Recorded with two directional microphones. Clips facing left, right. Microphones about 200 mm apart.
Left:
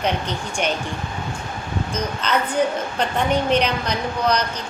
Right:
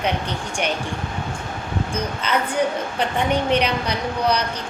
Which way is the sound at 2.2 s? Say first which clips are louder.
Left 1 dB; 10° right (ahead or behind).